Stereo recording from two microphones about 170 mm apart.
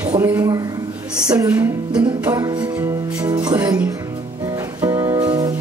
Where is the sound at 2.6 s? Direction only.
5° right (ahead or behind).